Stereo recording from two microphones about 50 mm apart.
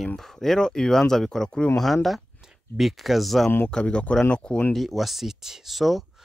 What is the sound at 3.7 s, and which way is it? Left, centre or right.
Speech, centre.